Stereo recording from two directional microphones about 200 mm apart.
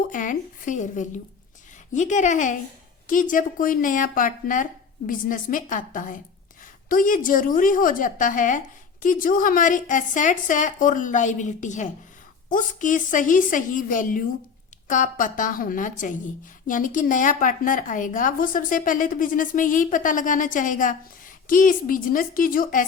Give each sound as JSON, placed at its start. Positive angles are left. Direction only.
{"t": 0.1, "sound": "a woman's voice", "side_deg": 40}